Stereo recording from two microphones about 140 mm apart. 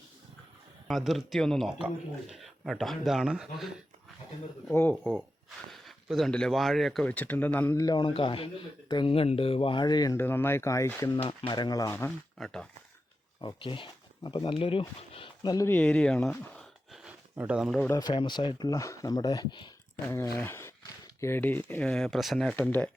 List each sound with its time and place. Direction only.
0.9 s speech: centre (ahead or behind)
4.7 s speech: 15° left (ahead or behind)
5.7 s speech: centre (ahead or behind)
7.8 s speech: 30° left (ahead or behind)
8.1 s speech: 40° left (ahead or behind)
10.2 s speech: 15° left (ahead or behind)
11.2 s speech: 35° left (ahead or behind); by 12.1 s 20° left (ahead or behind)
12.4 s speech: 5° left (ahead or behind)
13.4 s speech: 35° left (ahead or behind)
15.4 s speech: 25° left (ahead or behind)
15.7 s speech: 10° left (ahead or behind)
17.8 s speech: 30° left (ahead or behind)
20.1 s speech: 20° left (ahead or behind)